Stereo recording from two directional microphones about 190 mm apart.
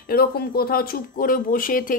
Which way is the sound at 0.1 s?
55° left (ahead or behind).